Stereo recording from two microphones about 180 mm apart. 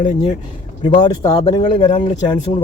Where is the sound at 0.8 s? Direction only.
25° left (ahead or behind).